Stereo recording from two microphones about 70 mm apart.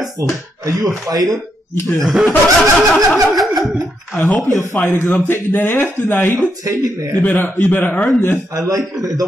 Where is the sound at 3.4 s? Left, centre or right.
Centre.